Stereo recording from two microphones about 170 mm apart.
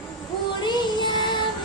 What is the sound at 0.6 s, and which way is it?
Music, 25° left (ahead or behind).